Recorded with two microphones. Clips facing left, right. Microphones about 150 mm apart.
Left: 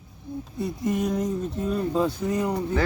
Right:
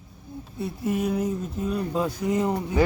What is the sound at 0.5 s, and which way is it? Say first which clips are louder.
Speech: even; 5° right (ahead or behind).